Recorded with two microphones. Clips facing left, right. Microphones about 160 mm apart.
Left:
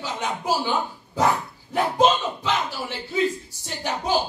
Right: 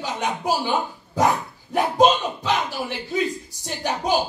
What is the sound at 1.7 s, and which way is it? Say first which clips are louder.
Speech: right 2 dB; 15° right (ahead or behind).